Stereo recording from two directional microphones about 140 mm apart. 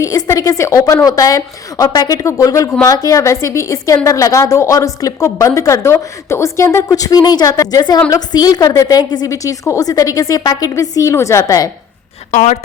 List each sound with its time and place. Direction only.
0.0 s a woman's voice: 25° left (ahead or behind)
12.3 s a woman's voice: 60° left (ahead or behind)